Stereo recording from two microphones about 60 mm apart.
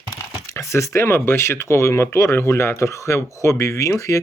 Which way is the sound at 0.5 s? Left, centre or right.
Left.